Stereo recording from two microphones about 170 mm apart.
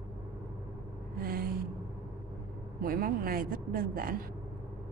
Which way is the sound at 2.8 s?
60° right (ahead or behind).